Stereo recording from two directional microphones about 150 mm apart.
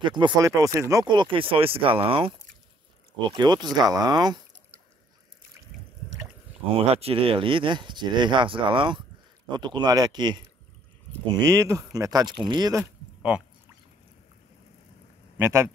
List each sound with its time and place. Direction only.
0.0 s speech: 30° right (ahead or behind)
1.0 s speech: 30° right (ahead or behind)
6.9 s speech: 40° right (ahead or behind)
11.4 s speech: 20° right (ahead or behind)
13.2 s boat: 10° right (ahead or behind)
15.3 s speech: 15° right (ahead or behind)